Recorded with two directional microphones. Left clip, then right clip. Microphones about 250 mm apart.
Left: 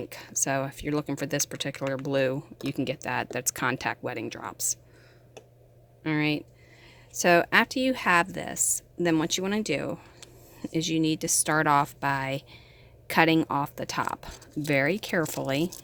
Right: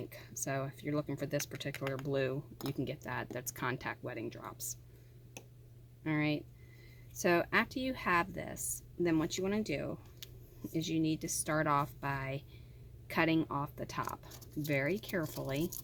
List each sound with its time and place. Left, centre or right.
0.0 s speech: left
6.0 s speech: left